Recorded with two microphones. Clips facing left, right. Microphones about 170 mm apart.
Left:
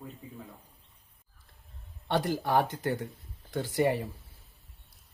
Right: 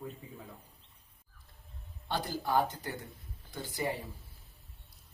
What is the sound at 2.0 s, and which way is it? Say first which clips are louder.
Speech: left 6 dB; 75° left (ahead or behind).